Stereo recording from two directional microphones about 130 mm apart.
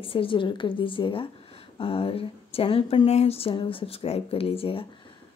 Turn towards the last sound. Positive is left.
turn(degrees=45)  # may be behind; listen again after turning